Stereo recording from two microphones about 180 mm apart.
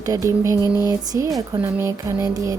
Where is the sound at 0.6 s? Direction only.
20° left (ahead or behind).